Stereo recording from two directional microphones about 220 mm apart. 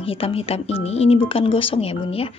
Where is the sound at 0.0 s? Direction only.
25° left (ahead or behind).